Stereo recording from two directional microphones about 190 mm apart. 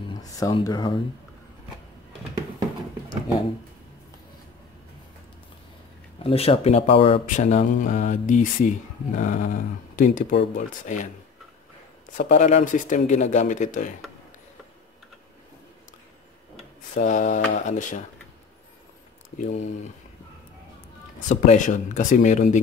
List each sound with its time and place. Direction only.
0.1 s speech: 20° left (ahead or behind)
6.2 s speech: 30° left (ahead or behind)
12.1 s speech: 40° left (ahead or behind)
16.9 s speech: 40° left (ahead or behind)
19.3 s speech: 40° left (ahead or behind)
21.3 s speech: 40° left (ahead or behind)